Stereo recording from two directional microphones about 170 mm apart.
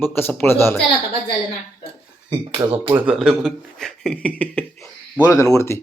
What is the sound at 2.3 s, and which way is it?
Speech, 30° right (ahead or behind).